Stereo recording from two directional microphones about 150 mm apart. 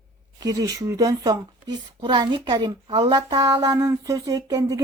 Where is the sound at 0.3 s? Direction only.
25° right (ahead or behind).